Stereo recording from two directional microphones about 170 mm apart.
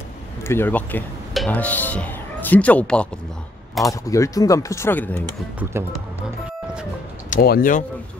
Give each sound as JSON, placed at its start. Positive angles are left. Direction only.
{"t": 0.4, "sound": "speech", "side_deg": 15}
{"t": 3.8, "sound": "speech", "side_deg": 20}
{"t": 5.6, "sound": "speech", "side_deg": -15}
{"t": 7.2, "sound": "speech", "side_deg": 60}